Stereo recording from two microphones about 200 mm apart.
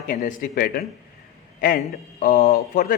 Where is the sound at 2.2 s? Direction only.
45° left (ahead or behind).